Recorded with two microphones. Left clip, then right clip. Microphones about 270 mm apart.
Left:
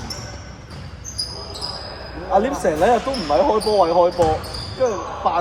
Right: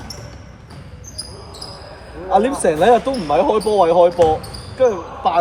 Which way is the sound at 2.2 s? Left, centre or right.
Right.